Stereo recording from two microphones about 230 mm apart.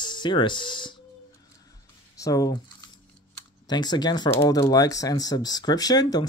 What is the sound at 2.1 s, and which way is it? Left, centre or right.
Speech, centre.